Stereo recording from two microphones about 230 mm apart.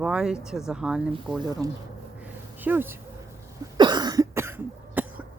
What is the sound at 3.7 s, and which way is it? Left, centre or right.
Cough, centre.